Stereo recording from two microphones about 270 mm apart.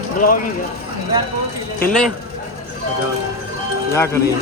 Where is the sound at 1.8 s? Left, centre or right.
Centre.